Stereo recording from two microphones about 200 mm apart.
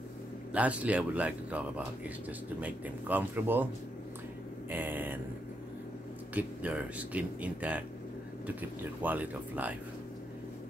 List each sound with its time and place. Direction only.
0.5 s speech: 5° right (ahead or behind)
2.6 s speech: 10° right (ahead or behind)
4.6 s speech: 10° right (ahead or behind)
6.3 s speech: 5° right (ahead or behind)